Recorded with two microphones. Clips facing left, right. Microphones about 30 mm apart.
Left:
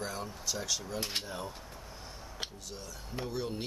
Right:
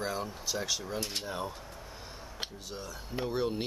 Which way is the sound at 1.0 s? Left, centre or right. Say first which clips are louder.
Even; centre.